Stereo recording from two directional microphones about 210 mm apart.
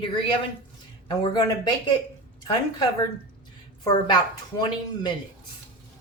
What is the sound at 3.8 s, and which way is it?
Speech, 20° left (ahead or behind).